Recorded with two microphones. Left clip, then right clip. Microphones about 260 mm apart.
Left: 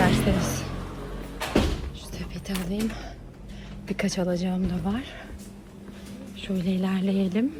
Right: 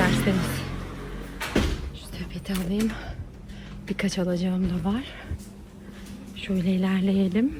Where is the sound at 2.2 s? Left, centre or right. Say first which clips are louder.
Right 1 dB; centre.